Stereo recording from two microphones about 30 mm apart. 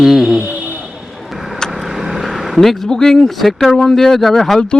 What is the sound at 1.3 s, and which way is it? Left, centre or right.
Vehicle, centre.